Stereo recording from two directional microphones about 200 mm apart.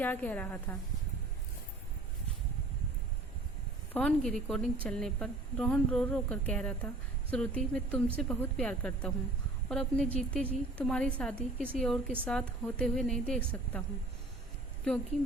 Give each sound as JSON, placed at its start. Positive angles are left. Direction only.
{"t": 0.0, "sound": "a woman's voice", "side_deg": 10}
{"t": 3.9, "sound": "a woman's voice", "side_deg": 5}